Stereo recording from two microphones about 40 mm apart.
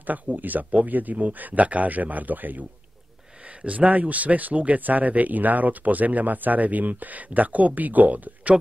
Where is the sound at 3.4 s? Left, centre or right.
Right.